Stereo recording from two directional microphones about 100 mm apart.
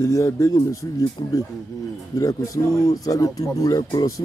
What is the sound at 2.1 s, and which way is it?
Speech, 35° left (ahead or behind).